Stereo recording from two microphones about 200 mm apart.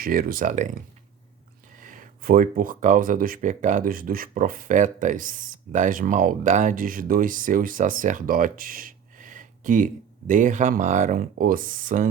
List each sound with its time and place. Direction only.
0.0 s speech: 45° right (ahead or behind)
1.8 s speech: 40° right (ahead or behind)